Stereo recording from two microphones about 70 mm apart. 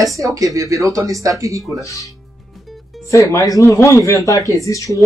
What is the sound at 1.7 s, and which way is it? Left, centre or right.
Speech, left.